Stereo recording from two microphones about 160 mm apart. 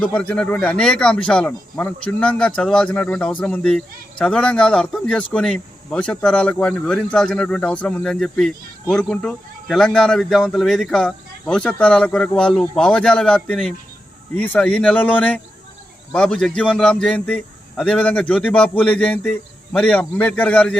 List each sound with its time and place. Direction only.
0.0 s a man's voice: 10° left (ahead or behind)